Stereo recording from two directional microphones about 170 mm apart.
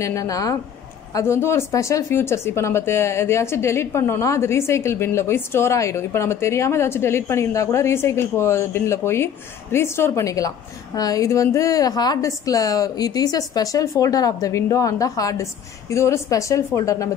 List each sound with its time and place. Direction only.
0.0 s a woman's voice: 20° left (ahead or behind)